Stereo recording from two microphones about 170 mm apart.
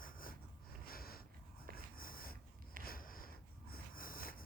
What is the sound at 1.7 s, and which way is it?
Wheeze, 60° left (ahead or behind).